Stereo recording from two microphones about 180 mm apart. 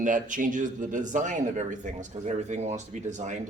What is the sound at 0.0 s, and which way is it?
A man's voice, 45° right (ahead or behind).